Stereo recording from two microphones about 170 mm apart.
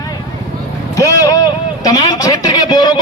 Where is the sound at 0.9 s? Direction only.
20° left (ahead or behind).